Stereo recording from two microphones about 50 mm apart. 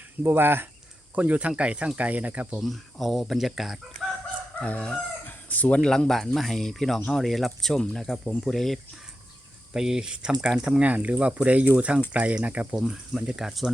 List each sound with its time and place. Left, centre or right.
0.2 s speech: right
1.1 s speech: right
2.5 s speech: centre
4.6 s crowing: left
5.2 s chicken: left
5.8 s speech: centre
9.7 s speech: centre; by 12.6 s right
12.7 s speech: centre